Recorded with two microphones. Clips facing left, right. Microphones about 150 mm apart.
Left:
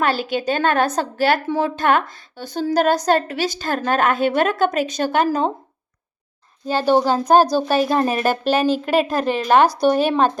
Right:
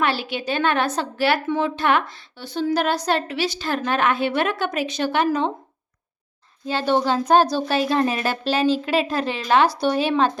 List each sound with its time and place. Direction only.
0.0 s a woman's voice: 45° left (ahead or behind)
6.7 s a woman's voice: 40° left (ahead or behind)